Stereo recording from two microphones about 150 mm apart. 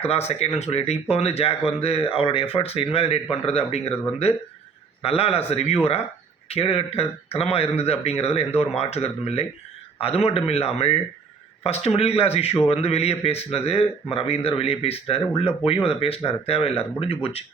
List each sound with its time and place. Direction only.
0.0 s a man's voice: 45° left (ahead or behind)